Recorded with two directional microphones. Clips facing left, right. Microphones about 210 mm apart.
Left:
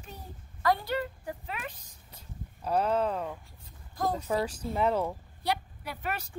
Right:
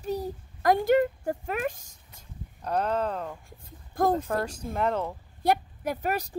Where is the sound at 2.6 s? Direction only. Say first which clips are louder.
Even; 5° left (ahead or behind).